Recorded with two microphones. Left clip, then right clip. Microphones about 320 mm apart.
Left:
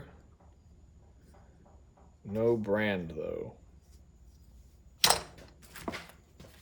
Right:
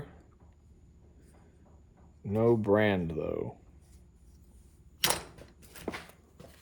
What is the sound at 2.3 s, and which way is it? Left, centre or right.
Speech, centre.